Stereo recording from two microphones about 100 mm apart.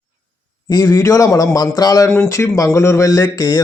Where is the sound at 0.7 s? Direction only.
40° left (ahead or behind).